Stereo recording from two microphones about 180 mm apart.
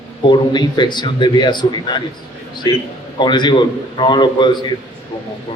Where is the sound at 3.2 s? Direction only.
25° left (ahead or behind).